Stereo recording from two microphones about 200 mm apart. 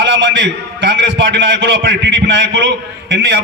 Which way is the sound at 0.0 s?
65° right (ahead or behind).